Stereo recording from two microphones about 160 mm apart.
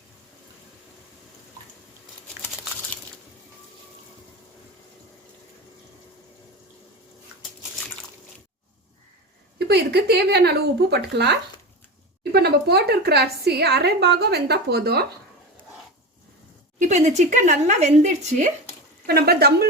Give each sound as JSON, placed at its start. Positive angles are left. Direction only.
{"t": 9.6, "sound": "a woman's voice", "side_deg": -90}
{"t": 16.8, "sound": "speech", "side_deg": -45}
{"t": 19.0, "sound": "speech", "side_deg": -75}